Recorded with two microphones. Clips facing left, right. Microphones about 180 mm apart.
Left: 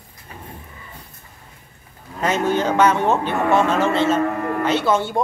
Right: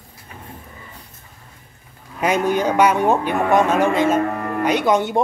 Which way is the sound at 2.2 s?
10° right (ahead or behind).